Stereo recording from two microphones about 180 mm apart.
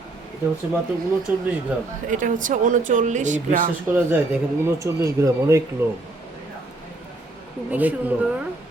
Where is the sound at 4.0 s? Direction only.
10° right (ahead or behind).